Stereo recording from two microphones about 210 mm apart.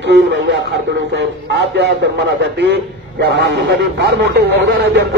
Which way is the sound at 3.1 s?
55° right (ahead or behind).